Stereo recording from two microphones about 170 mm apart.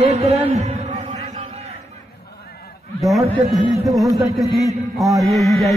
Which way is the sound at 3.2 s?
35° right (ahead or behind).